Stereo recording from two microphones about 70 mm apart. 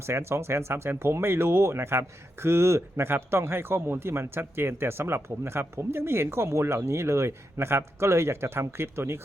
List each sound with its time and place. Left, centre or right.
0.0 s speech: right